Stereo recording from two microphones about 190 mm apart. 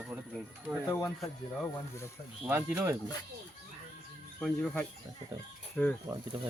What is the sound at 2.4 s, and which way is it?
Speech, 10° right (ahead or behind).